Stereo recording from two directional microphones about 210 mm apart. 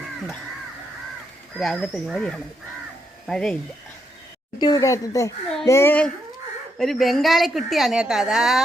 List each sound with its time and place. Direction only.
1.5 s a woman's voice: centre (ahead or behind)
4.6 s a woman's voice: 15° left (ahead or behind); by 8.6 s centre (ahead or behind)